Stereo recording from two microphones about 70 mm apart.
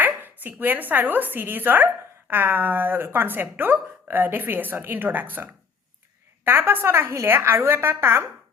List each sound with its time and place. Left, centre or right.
0.0 s a woman's voice: right